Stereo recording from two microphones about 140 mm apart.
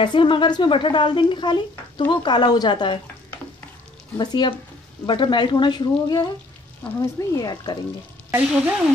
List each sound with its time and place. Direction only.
0.0 s speech: 35° left (ahead or behind)
4.2 s speech: 30° left (ahead or behind)
8.3 s speech: 10° right (ahead or behind)